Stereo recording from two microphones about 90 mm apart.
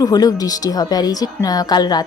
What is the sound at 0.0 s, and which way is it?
A woman's voice, 45° left (ahead or behind).